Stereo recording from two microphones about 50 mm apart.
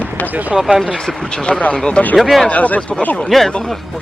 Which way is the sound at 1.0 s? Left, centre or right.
Centre.